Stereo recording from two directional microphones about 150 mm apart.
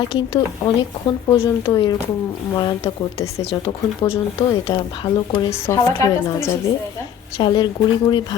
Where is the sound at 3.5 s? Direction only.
35° left (ahead or behind).